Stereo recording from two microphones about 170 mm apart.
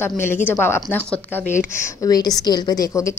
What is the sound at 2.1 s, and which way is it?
A woman's voice, 20° left (ahead or behind).